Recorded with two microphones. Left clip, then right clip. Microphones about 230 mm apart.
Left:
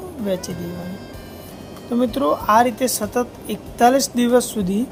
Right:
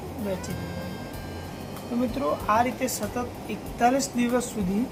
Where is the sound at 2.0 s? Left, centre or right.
Left.